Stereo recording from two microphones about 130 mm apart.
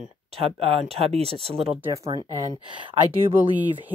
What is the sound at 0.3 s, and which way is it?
Speech, 50° right (ahead or behind).